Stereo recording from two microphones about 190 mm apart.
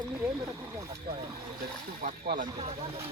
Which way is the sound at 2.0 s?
45° right (ahead or behind).